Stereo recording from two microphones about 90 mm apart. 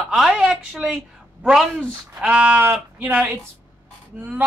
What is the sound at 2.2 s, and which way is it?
Speech, 15° right (ahead or behind).